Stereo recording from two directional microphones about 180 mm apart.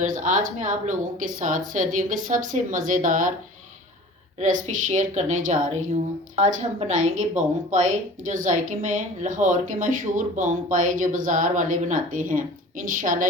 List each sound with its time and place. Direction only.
0.0 s speech: 45° right (ahead or behind)
4.4 s speech: 40° right (ahead or behind)